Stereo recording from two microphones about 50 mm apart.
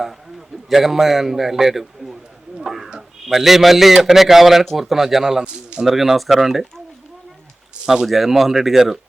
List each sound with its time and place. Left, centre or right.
0.0 s a man's voice: centre
8.0 s speech: centre